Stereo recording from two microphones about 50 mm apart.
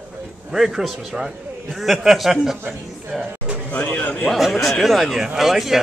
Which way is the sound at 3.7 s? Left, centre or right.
Left.